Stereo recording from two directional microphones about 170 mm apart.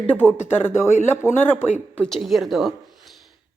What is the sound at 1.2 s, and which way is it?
Speech, 15° left (ahead or behind).